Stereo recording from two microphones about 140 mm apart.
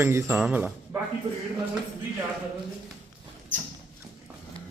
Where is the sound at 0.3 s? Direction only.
5° right (ahead or behind).